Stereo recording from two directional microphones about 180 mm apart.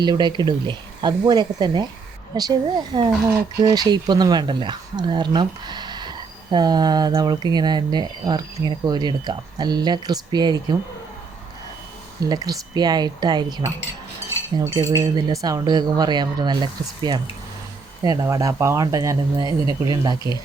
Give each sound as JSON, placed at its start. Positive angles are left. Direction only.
{"t": 0.0, "sound": "speech", "side_deg": -25}
{"t": 12.2, "sound": "speech", "side_deg": -20}
{"t": 14.9, "sound": "speech", "side_deg": -20}